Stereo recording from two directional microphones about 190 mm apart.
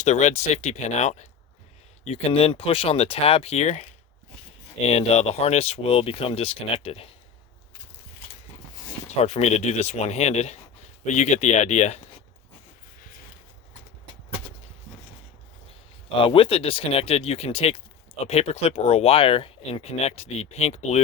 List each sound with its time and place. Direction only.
0.0 s speech: 35° left (ahead or behind)
9.0 s speech: 35° left (ahead or behind)
16.0 s speech: 30° left (ahead or behind)